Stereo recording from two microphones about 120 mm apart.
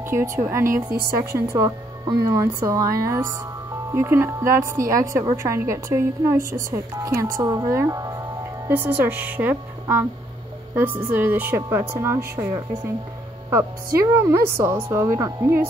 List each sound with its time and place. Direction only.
0.5 s a woman's voice: 20° right (ahead or behind)
8.6 s speech: 15° right (ahead or behind)
13.5 s a woman's voice: 20° right (ahead or behind)